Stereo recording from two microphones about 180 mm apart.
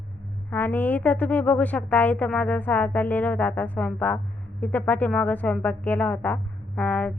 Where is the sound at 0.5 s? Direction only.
10° left (ahead or behind).